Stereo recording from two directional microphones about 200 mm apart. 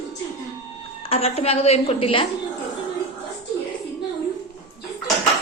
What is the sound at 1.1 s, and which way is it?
A woman's voice, 30° left (ahead or behind).